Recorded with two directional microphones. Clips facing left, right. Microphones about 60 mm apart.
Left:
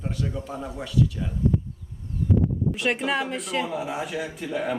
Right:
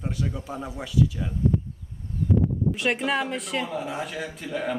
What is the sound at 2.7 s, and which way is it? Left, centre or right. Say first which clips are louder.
Speech: even; centre.